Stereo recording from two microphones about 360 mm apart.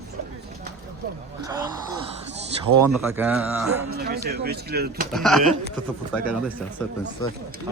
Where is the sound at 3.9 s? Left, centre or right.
Right.